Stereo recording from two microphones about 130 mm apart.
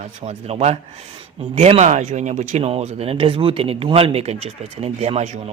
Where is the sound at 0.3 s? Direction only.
55° right (ahead or behind).